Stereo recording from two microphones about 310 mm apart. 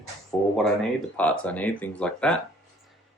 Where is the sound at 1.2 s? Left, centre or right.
Centre.